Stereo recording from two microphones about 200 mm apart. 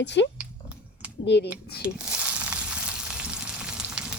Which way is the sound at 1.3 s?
60° left (ahead or behind).